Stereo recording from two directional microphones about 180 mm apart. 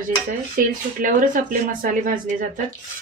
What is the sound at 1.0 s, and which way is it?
Speech, 50° right (ahead or behind).